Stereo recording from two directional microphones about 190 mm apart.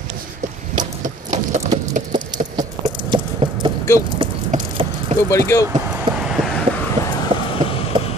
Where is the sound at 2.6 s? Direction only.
25° right (ahead or behind).